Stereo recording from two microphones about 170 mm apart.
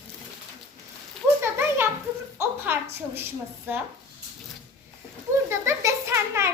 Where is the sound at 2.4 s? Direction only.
15° right (ahead or behind).